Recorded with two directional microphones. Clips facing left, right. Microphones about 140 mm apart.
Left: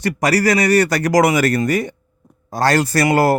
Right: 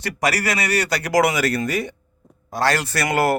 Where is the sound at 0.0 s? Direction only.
40° left (ahead or behind).